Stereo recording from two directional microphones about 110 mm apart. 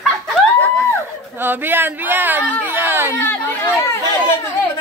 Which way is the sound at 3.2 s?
20° left (ahead or behind).